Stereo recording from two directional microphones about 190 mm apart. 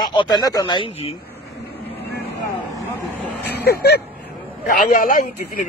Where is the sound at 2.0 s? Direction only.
60° left (ahead or behind).